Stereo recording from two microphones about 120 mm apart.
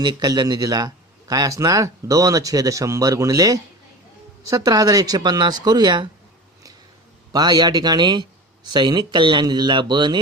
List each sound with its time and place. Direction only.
0.0 s a man's voice: 35° right (ahead or behind)
7.3 s speech: 35° right (ahead or behind)